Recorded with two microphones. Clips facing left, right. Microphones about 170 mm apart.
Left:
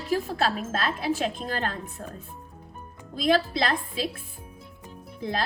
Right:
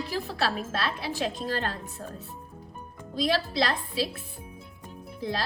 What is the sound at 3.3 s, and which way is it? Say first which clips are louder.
Speech: left 5 dB; 50° left (ahead or behind).